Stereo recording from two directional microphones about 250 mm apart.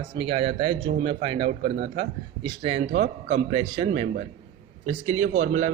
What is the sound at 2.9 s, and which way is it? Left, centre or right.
Speech, right.